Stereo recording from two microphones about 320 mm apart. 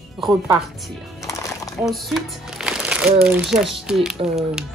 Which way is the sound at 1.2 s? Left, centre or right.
Centre.